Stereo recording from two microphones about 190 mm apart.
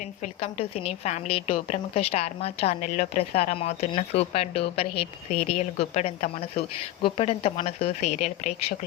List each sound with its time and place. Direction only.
0.4 s a woman's voice: 35° left (ahead or behind)